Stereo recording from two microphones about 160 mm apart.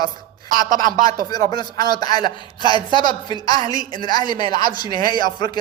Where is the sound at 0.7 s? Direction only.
55° right (ahead or behind).